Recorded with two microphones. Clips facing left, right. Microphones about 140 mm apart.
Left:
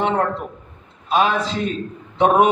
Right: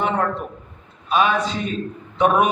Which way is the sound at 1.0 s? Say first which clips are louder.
Left 1 dB; 30° left (ahead or behind).